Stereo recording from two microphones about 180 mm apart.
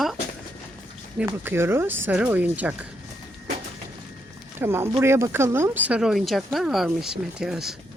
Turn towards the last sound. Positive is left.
turn(degrees=-5)  # may be behind; listen again after turning